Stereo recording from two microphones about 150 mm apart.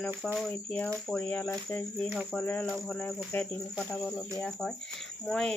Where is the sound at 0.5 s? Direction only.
10° left (ahead or behind).